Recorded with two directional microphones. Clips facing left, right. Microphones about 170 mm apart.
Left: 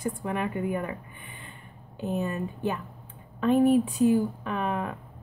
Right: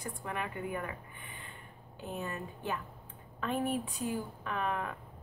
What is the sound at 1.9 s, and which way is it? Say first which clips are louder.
Speech: left 10 dB; 20° left (ahead or behind).